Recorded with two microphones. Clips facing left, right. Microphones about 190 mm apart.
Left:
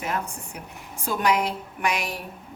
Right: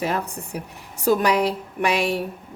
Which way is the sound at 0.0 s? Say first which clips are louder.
Right 5 dB; 35° right (ahead or behind).